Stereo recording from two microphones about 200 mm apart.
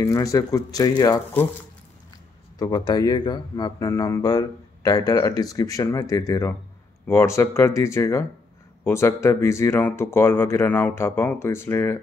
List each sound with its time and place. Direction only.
0.0 s speech: 15° left (ahead or behind)
2.6 s speech: 20° left (ahead or behind)